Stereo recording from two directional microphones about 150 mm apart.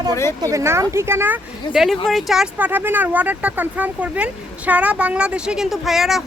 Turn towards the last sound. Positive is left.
turn(degrees=0)  # may be behind; listen again after turning